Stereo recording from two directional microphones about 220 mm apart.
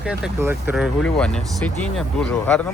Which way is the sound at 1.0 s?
5° left (ahead or behind).